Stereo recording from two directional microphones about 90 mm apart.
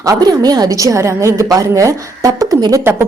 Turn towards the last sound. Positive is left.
turn(degrees=-25)  # may be behind; listen again after turning